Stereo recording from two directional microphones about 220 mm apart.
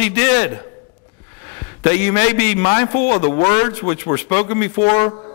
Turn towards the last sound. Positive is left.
turn(degrees=20)  # may be behind; listen again after turning